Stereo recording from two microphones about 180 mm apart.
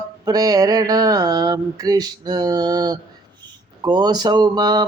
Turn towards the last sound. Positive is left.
turn(degrees=-20)  # may be behind; listen again after turning